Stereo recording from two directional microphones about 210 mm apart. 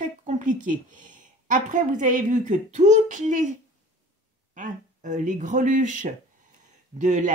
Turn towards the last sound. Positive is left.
turn(degrees=-35)  # may be behind; listen again after turning